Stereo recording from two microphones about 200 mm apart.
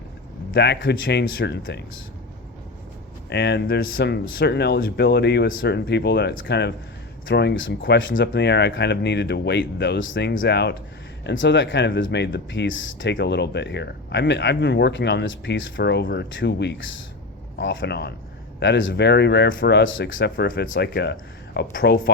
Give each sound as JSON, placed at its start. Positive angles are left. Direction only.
{"t": 0.5, "sound": "speech", "side_deg": 60}
{"t": 3.2, "sound": "speech", "side_deg": 55}